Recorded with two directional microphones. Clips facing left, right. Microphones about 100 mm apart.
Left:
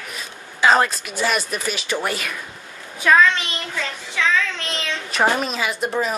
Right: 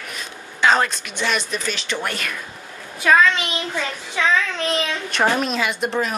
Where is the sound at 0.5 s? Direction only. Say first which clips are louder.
Left 1 dB; 5° left (ahead or behind).